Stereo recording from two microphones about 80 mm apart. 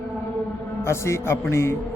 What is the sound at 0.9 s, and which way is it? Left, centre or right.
Speech, left.